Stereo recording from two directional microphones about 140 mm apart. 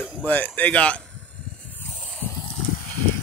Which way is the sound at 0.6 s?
10° left (ahead or behind).